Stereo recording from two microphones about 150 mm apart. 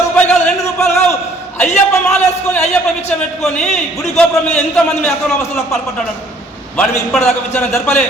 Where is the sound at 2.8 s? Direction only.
5° left (ahead or behind).